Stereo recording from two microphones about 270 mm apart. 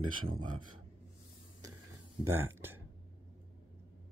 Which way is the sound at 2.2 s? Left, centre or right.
Centre.